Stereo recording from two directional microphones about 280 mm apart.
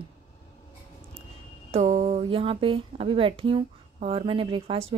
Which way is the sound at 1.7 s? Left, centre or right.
Right.